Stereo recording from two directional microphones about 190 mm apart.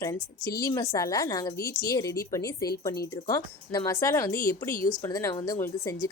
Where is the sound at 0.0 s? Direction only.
15° left (ahead or behind).